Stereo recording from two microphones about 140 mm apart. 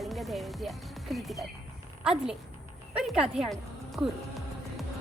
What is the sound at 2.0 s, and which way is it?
A woman's voice, 5° right (ahead or behind).